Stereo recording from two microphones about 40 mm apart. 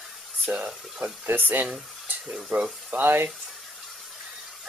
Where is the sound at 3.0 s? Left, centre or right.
Right.